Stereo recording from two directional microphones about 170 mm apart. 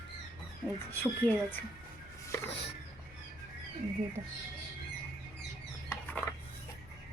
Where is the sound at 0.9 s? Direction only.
10° left (ahead or behind).